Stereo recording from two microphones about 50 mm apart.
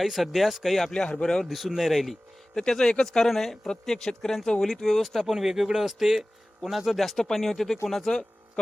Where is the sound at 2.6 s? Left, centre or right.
Centre.